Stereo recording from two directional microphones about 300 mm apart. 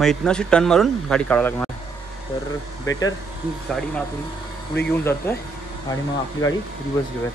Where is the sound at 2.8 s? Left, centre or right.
Centre.